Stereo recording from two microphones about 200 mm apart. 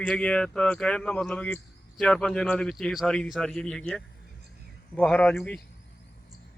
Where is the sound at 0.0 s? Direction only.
5° left (ahead or behind).